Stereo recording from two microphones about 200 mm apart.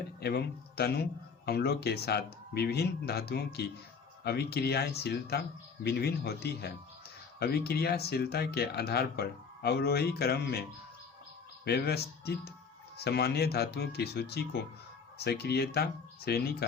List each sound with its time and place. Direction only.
0.2 s speech: 55° left (ahead or behind)